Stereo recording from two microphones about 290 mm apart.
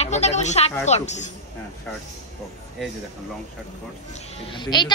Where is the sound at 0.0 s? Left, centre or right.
Left.